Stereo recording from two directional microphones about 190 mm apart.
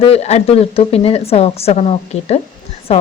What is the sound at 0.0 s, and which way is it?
Speech, 35° left (ahead or behind).